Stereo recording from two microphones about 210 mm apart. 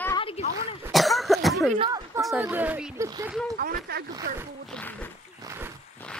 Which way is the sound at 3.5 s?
45° right (ahead or behind).